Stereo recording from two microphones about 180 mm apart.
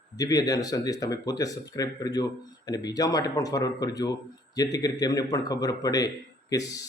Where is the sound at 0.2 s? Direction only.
20° left (ahead or behind).